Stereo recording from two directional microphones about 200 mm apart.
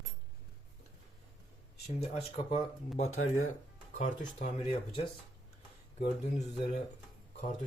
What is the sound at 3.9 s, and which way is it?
Speech, 40° left (ahead or behind).